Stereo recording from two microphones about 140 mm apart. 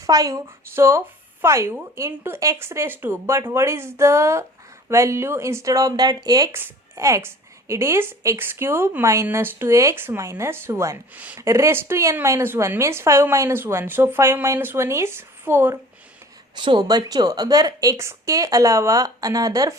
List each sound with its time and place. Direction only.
0.0 s speech: 25° right (ahead or behind)
16.6 s speech: 35° right (ahead or behind)